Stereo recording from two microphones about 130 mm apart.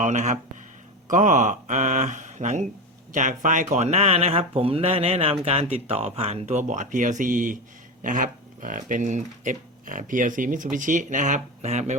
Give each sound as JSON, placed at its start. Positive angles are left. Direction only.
{"t": 0.0, "sound": "speech", "side_deg": -70}